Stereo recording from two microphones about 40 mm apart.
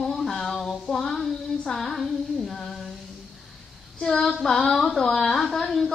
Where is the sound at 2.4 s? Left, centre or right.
Centre.